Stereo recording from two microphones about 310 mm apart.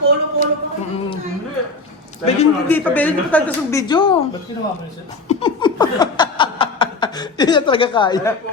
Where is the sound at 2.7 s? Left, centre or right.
Centre.